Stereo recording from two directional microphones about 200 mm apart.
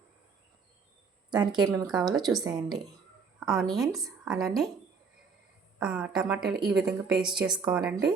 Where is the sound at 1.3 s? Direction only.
20° right (ahead or behind).